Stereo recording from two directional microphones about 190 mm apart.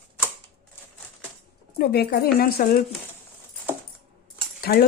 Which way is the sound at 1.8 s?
55° left (ahead or behind).